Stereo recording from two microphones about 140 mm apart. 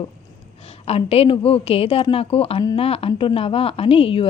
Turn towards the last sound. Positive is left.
turn(degrees=40)  # may be behind; listen again after turning